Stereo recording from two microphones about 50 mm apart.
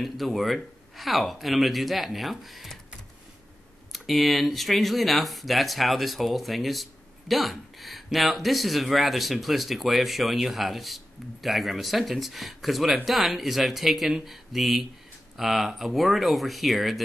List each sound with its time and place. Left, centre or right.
0.0 s speech: centre
3.9 s speech: centre